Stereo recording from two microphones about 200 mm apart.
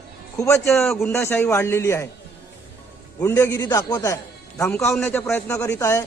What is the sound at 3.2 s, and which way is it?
A man's voice, 10° left (ahead or behind).